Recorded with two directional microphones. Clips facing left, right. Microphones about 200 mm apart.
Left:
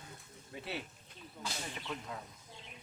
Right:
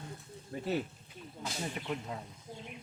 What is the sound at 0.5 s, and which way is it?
Speech, 45° right (ahead or behind).